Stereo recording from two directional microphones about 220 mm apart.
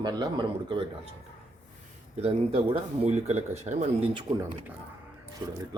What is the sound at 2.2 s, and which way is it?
Speech, 25° right (ahead or behind).